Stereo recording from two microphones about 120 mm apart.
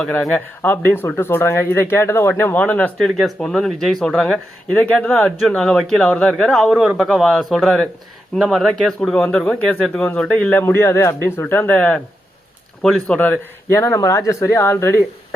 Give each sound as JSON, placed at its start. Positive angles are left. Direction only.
{"t": 0.0, "sound": "speech", "side_deg": 5}
{"t": 3.2, "sound": "speech", "side_deg": 0}
{"t": 13.1, "sound": "speech", "side_deg": 20}